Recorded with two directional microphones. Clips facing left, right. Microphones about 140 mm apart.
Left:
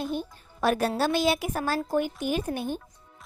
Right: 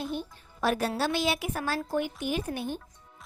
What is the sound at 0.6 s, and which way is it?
A woman's voice, 50° left (ahead or behind).